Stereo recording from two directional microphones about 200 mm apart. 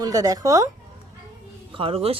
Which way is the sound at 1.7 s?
30° right (ahead or behind).